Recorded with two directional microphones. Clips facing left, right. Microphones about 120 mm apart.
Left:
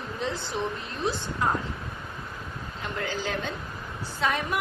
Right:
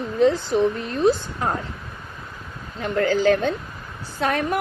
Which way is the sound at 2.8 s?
60° right (ahead or behind).